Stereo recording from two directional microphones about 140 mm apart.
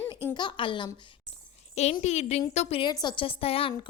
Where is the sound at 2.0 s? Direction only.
55° left (ahead or behind).